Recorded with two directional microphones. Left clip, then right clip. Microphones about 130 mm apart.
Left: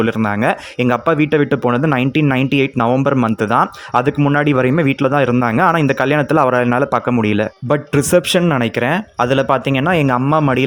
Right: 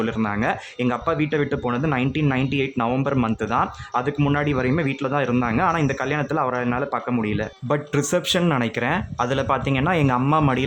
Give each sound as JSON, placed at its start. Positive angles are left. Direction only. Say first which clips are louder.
{"t": 0.0, "sound": "speech", "louder": "left 7 dB", "side_deg": 45}
{"t": 7.7, "sound": "speech", "louder": "left 8 dB", "side_deg": 35}